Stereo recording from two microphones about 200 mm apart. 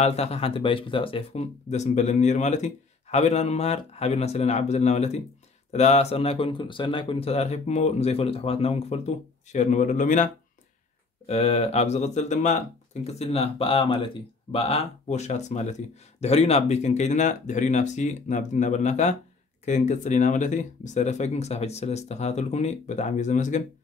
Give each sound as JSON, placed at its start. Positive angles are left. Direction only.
{"t": 0.0, "sound": "speech", "side_deg": 30}